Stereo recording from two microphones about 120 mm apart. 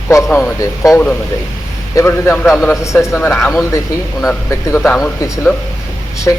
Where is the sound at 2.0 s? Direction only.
20° left (ahead or behind).